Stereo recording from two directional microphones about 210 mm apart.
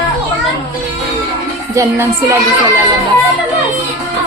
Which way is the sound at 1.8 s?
10° right (ahead or behind).